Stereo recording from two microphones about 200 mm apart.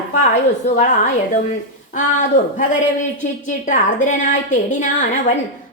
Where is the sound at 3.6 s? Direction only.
40° left (ahead or behind).